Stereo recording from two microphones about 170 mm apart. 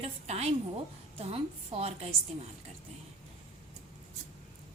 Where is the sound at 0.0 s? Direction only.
40° right (ahead or behind).